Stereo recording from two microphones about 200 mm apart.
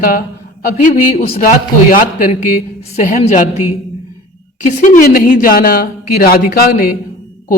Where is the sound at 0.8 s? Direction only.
30° left (ahead or behind).